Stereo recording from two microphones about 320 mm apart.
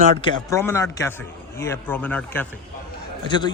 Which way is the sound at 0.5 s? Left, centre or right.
Centre.